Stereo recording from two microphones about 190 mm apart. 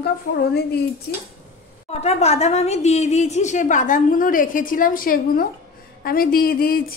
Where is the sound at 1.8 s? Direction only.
35° left (ahead or behind); by 6.8 s 50° left (ahead or behind).